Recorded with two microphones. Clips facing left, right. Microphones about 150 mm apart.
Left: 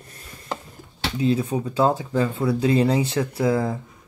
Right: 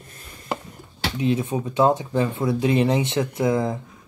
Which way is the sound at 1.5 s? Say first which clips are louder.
Right 1 dB; 20° right (ahead or behind).